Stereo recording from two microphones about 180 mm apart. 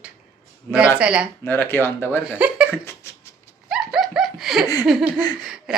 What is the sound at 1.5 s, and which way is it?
Speech, 10° left (ahead or behind).